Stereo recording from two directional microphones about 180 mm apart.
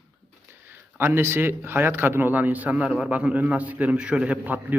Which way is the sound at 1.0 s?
15° right (ahead or behind).